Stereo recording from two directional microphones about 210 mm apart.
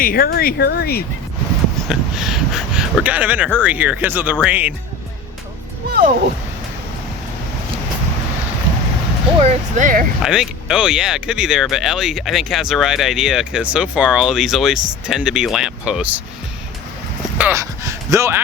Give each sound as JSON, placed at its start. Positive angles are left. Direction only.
{"t": 0.0, "sound": "speech", "side_deg": 45}
{"t": 1.9, "sound": "speech", "side_deg": 0}
{"t": 9.4, "sound": "speech", "side_deg": -35}
{"t": 10.2, "sound": "speech", "side_deg": -5}
{"t": 17.3, "sound": "speech", "side_deg": -10}